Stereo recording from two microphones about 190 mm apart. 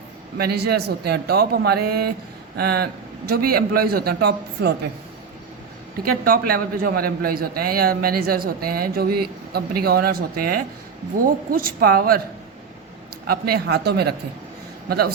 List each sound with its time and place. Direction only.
0.3 s a man's voice: 55° right (ahead or behind)
6.2 s a man's voice: 50° right (ahead or behind)
13.2 s a man's voice: 55° right (ahead or behind)